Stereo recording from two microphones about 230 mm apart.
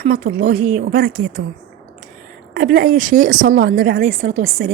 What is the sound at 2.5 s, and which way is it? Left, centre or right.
Speech, right.